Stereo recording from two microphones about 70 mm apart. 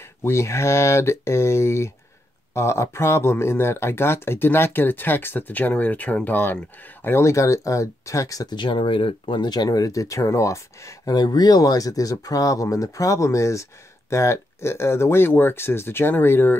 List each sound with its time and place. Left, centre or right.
0.2 s speech: left
11.1 s speech: left